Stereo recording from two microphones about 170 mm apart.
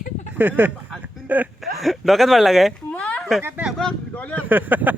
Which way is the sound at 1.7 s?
Centre (ahead or behind).